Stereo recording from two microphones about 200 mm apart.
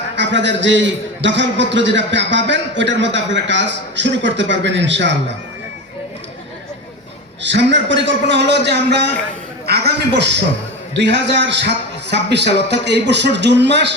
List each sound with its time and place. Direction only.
0.2 s a man's voice: 60° right (ahead or behind)
7.4 s a man's voice: 60° right (ahead or behind)